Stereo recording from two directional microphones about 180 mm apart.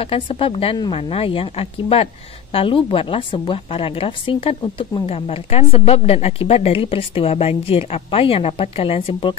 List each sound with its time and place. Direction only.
0.0 s a woman's voice: 30° left (ahead or behind)